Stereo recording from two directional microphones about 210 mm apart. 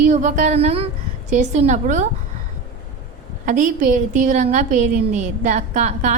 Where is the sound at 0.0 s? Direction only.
35° right (ahead or behind).